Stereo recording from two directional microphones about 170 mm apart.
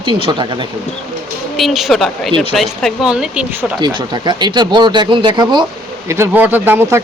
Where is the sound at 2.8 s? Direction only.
5° right (ahead or behind).